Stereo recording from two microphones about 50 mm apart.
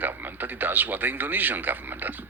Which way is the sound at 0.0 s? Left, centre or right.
Right.